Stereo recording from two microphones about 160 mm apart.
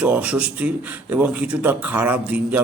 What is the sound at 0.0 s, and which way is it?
A man's voice, 10° right (ahead or behind).